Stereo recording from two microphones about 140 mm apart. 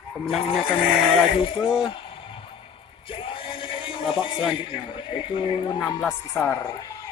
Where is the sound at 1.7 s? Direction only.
35° left (ahead or behind).